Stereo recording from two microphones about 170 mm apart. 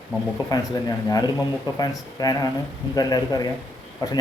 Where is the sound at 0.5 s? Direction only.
20° left (ahead or behind).